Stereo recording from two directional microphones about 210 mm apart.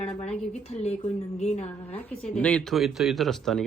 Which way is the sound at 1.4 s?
30° left (ahead or behind).